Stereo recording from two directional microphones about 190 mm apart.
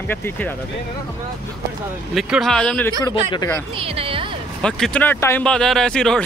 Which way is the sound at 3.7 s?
30° right (ahead or behind).